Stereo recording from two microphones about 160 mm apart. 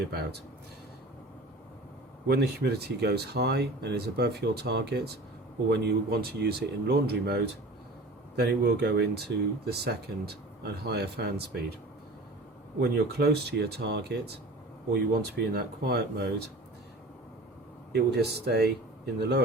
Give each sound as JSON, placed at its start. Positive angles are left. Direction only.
{"t": 0.0, "sound": "speech", "side_deg": -85}
{"t": 2.2, "sound": "speech", "side_deg": -90}
{"t": 12.8, "sound": "speech", "side_deg": -90}
{"t": 15.4, "sound": "speech", "side_deg": -85}
{"t": 17.9, "sound": "speech", "side_deg": -90}